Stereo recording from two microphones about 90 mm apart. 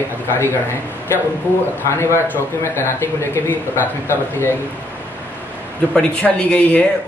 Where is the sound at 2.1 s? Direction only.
30° left (ahead or behind).